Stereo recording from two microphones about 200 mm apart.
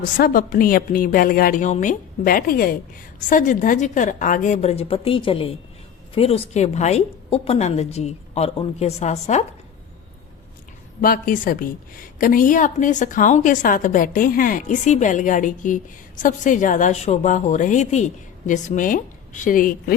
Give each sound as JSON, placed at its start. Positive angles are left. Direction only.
{"t": 0.2, "sound": "a woman's voice", "side_deg": 45}
{"t": 11.0, "sound": "a woman's voice", "side_deg": 45}